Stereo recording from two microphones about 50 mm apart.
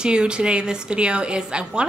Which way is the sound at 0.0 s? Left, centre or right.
Centre.